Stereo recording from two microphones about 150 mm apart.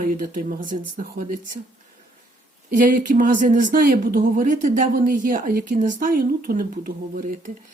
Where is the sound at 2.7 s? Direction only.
60° right (ahead or behind); by 6.9 s 75° right (ahead or behind).